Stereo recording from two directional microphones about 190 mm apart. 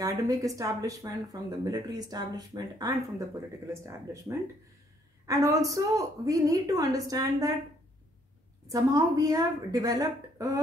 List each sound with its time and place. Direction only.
0.0 s a woman's voice: 15° right (ahead or behind)
8.6 s a woman's voice: 20° right (ahead or behind)